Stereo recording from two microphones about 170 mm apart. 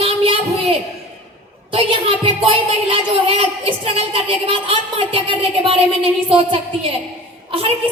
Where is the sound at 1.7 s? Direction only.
30° right (ahead or behind).